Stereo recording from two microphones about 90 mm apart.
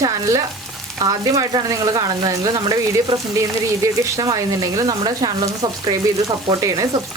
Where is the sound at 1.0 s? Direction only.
40° right (ahead or behind).